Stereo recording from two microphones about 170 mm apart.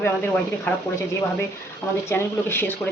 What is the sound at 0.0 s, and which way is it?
Speech, 10° left (ahead or behind).